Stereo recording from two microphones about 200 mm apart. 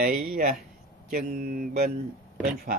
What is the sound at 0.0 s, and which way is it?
Speech, 45° right (ahead or behind).